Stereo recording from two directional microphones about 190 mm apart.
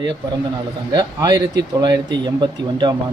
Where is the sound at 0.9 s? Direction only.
20° right (ahead or behind).